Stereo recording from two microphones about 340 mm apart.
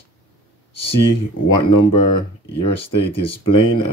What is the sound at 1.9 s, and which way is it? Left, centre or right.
Speech, left.